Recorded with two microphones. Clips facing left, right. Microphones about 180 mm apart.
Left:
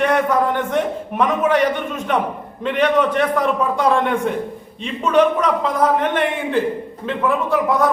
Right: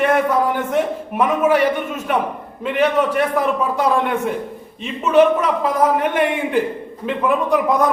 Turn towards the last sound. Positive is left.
turn(degrees=-15)  # may be behind; listen again after turning